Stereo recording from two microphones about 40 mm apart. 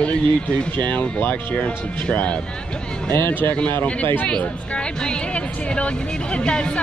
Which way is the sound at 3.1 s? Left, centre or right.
Left.